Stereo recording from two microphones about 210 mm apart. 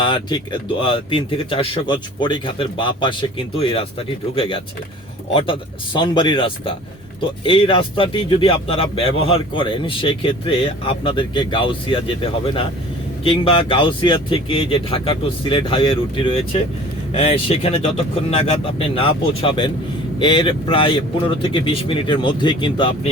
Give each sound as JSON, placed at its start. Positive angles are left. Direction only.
{"t": 0.0, "sound": "a man's voice", "side_deg": 20}